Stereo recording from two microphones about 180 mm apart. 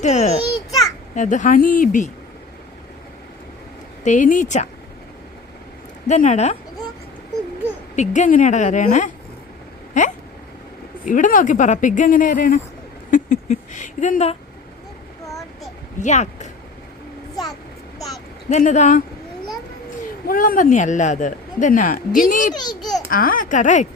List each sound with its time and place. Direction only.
0.0 s a child's voice: 40° left (ahead or behind)
4.0 s speech: 45° left (ahead or behind)
6.1 s speech: 40° left (ahead or behind)
7.9 s speech: 40° left (ahead or behind)
13.1 s a sound: 45° left (ahead or behind)
16.0 s speech: 40° left (ahead or behind)
18.4 s speech: 40° left (ahead or behind)
20.2 s speech: 50° left (ahead or behind)
22.5 s a child's voice: 25° left (ahead or behind)
23.0 s speech: 50° left (ahead or behind)